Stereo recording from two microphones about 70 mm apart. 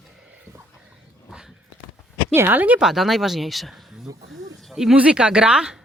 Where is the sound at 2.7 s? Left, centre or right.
Centre.